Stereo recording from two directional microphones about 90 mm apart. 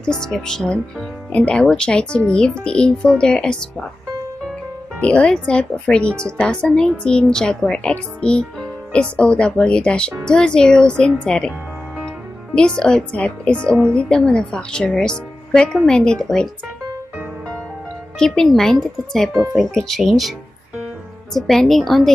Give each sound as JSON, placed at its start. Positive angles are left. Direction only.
{"t": 0.0, "sound": "speech", "side_deg": 5}
{"t": 5.0, "sound": "speech", "side_deg": 10}
{"t": 12.5, "sound": "speech", "side_deg": 10}
{"t": 13.6, "sound": "speech", "side_deg": -25}
{"t": 13.9, "sound": "speech", "side_deg": 10}
{"t": 18.2, "sound": "speech", "side_deg": 5}